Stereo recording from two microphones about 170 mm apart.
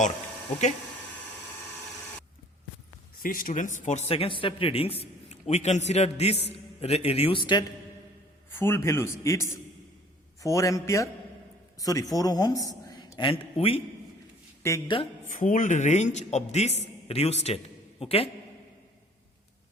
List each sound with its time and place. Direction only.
3.2 s a man's voice: 55° left (ahead or behind); by 7.6 s 30° left (ahead or behind)
8.4 s a man's voice: 15° left (ahead or behind); by 13.8 s 35° left (ahead or behind)
14.6 s a man's voice: 15° left (ahead or behind)
15.3 s a man's voice: 50° left (ahead or behind)